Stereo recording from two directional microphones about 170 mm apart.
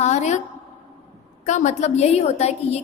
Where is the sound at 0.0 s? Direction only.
40° left (ahead or behind).